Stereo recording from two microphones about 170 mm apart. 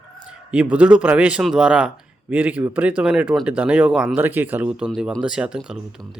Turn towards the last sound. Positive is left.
turn(degrees=-5)  # may be behind; listen again after turning